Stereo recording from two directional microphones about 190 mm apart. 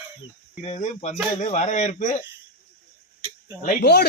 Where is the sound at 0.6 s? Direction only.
35° left (ahead or behind).